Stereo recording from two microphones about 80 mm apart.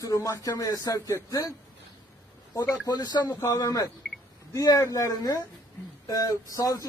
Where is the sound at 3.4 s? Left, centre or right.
Left.